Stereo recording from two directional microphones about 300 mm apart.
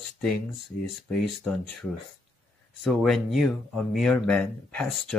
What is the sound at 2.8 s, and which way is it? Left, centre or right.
Speech, centre.